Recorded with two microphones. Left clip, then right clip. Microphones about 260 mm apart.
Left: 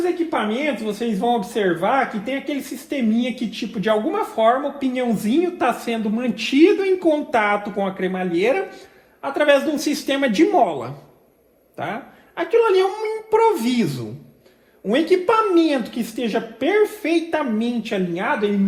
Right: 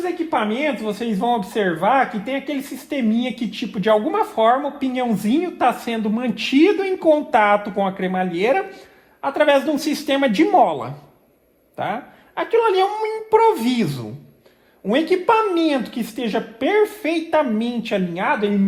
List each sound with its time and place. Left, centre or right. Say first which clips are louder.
0.0 s speech: even; right